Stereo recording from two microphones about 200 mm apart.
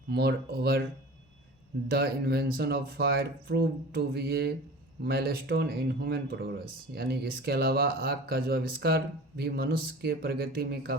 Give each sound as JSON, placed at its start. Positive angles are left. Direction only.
{"t": 0.1, "sound": "speech", "side_deg": -50}
{"t": 1.9, "sound": "speech", "side_deg": -50}